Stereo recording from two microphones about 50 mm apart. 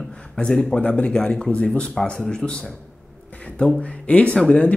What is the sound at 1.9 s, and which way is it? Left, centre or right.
Speech, centre.